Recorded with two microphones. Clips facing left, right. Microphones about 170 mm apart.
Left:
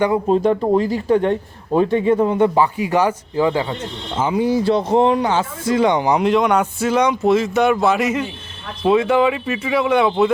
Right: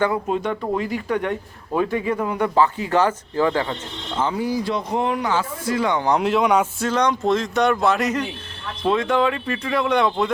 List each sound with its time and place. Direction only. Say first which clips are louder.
0.3 s speech: left 8 dB; 35° left (ahead or behind)
2.6 s speech: left 2 dB; 15° left (ahead or behind)
4.4 s speech: left 7 dB; 25° left (ahead or behind)
6.1 s speech: left 3 dB; centre (ahead or behind)
6.8 s speech: left 4 dB; 10° left (ahead or behind)